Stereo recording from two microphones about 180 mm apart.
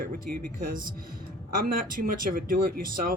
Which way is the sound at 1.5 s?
55° right (ahead or behind).